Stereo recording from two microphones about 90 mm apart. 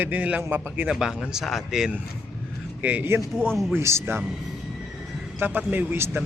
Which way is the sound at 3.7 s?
30° right (ahead or behind).